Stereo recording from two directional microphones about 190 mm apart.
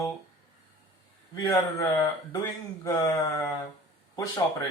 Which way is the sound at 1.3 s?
15° left (ahead or behind).